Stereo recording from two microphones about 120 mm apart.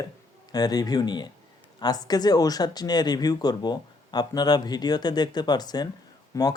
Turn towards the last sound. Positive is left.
turn(degrees=25)  # may be behind; listen again after turning